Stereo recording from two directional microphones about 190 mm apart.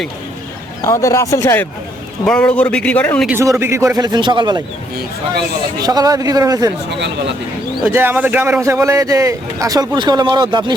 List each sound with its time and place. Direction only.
0.8 s a man's voice: 15° left (ahead or behind)
3.2 s speech: 15° right (ahead or behind)
5.8 s speech: 20° right (ahead or behind)
7.9 s speech: 10° right (ahead or behind)